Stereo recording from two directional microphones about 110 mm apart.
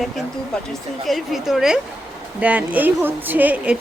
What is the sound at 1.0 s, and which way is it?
A woman's voice, centre (ahead or behind).